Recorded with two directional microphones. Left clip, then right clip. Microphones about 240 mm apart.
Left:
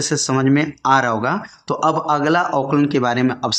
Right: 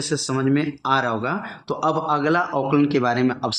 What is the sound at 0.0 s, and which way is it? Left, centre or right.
Speech, left.